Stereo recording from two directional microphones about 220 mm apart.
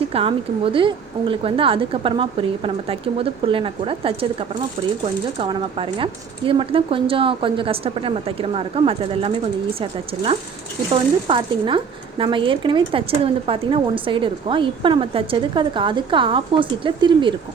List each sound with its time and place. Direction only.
0.1 s speech: 25° right (ahead or behind)
3.4 s speech: 25° right (ahead or behind)
5.4 s speech: 25° right (ahead or behind)
11.3 s speech: 20° right (ahead or behind)